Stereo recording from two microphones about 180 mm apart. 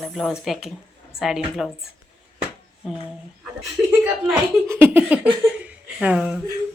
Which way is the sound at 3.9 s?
10° right (ahead or behind).